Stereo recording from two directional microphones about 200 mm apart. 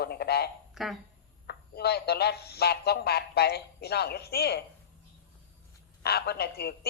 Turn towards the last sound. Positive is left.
turn(degrees=50)  # may be behind; listen again after turning